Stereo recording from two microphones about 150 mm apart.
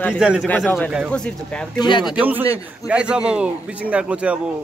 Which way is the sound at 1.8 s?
30° left (ahead or behind).